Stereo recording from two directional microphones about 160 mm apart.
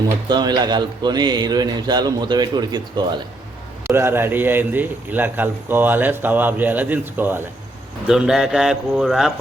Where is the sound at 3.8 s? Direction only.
15° right (ahead or behind).